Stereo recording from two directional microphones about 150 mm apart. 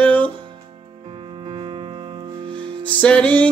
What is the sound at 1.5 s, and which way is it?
Music, 35° right (ahead or behind).